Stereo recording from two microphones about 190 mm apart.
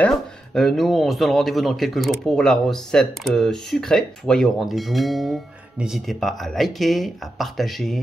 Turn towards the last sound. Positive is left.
turn(degrees=0)  # may be behind; listen again after turning